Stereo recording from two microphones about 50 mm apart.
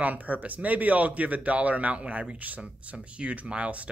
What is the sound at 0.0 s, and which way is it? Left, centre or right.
A man's voice, right.